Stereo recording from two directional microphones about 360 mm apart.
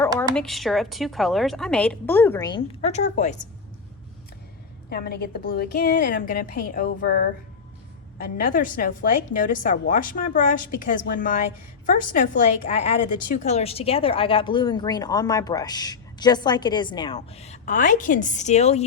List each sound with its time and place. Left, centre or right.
0.2 s speech: centre
4.9 s a woman's voice: left
8.4 s a woman's voice: left